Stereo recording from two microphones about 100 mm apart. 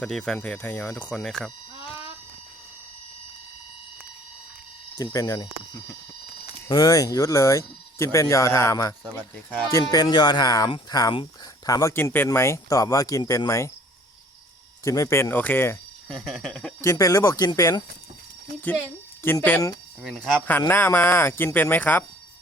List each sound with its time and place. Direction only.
0.0 s speech: 5° left (ahead or behind)
1.1 s speech: 5° left (ahead or behind)
5.1 s speech: 40° left (ahead or behind)
6.7 s speech: 35° left (ahead or behind)
14.8 s speech: 30° left (ahead or behind)
16.2 s speech: 5° left (ahead or behind)
16.8 s speech: 30° left (ahead or behind)
19.2 s speech: 20° left (ahead or behind)
20.0 s speech: centre (ahead or behind)
20.5 s speech: 20° left (ahead or behind)